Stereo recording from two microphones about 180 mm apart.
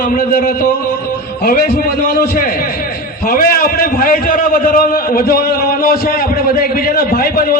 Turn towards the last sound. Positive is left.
turn(degrees=55)  # may be behind; listen again after turning